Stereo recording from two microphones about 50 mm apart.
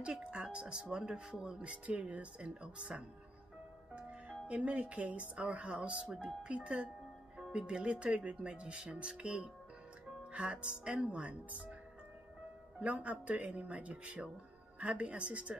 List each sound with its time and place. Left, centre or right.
0.0 s speech: right
3.9 s music: right
5.3 s speech: right
12.8 s speech: right